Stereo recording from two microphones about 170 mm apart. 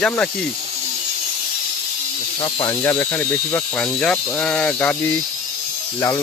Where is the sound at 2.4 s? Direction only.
30° left (ahead or behind).